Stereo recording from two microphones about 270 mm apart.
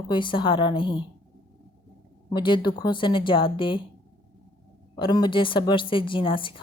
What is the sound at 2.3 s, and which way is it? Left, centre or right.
Speech, centre.